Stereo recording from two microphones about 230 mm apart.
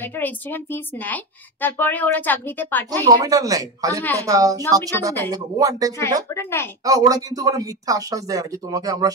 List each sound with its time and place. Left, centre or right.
0.0 s speech: centre
3.1 s speech: centre
6.3 s speech: centre
6.8 s speech: centre